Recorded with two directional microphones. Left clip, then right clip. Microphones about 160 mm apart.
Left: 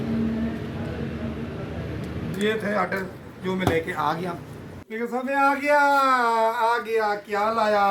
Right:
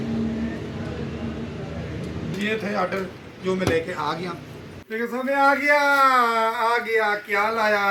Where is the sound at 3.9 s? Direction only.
35° left (ahead or behind).